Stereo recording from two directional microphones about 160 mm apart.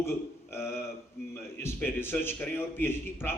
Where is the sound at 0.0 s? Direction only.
15° left (ahead or behind).